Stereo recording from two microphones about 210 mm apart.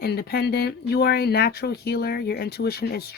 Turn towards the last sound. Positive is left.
turn(degrees=50)  # may be behind; listen again after turning